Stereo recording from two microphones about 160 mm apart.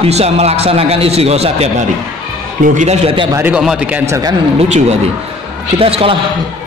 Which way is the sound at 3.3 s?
10° right (ahead or behind).